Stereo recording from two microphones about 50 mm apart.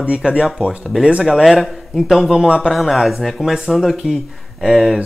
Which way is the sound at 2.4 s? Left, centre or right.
Centre.